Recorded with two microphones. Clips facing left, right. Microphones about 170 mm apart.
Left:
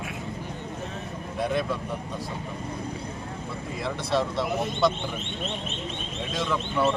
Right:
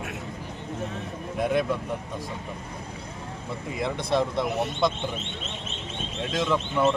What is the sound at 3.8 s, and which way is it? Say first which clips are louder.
Speech: right 2 dB; 15° right (ahead or behind).